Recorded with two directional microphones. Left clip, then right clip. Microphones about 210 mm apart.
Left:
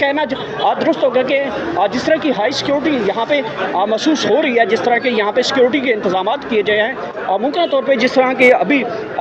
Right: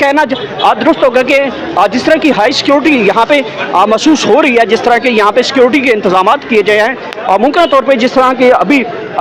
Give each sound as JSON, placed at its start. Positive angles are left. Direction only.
{"t": 0.0, "sound": "speech", "side_deg": -15}